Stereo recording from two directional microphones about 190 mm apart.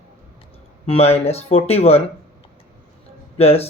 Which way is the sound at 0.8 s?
30° left (ahead or behind).